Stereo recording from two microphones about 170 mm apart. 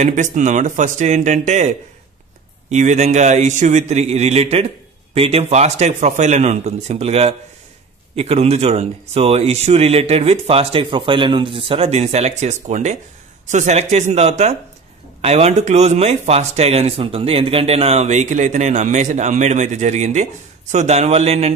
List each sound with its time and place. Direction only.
0.0 s a man's voice: 45° right (ahead or behind)
2.7 s a man's voice: 40° right (ahead or behind)